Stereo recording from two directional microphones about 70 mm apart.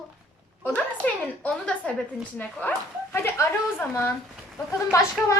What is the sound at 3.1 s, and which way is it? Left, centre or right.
A woman's voice, left.